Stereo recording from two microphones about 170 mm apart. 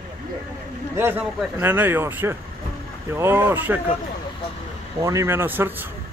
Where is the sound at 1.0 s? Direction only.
10° right (ahead or behind).